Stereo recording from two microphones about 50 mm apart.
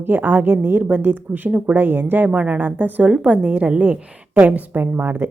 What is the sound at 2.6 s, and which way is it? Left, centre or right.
A woman's voice, right.